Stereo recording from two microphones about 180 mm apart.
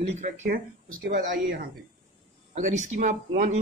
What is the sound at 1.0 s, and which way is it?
Speech, 55° right (ahead or behind).